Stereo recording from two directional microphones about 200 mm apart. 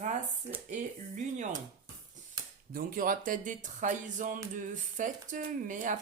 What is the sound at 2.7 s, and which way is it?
Speech, 45° right (ahead or behind).